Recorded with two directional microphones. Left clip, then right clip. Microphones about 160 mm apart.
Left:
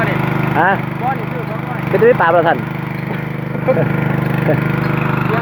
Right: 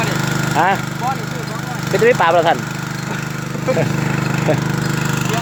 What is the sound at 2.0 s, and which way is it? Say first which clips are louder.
Speech: left 1 dB; 10° right (ahead or behind).